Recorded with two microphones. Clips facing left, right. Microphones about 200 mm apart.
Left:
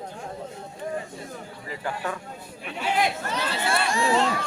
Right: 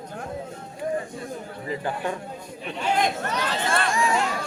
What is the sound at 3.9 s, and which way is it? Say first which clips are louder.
Crowd: left 2 dB; 30° left (ahead or behind).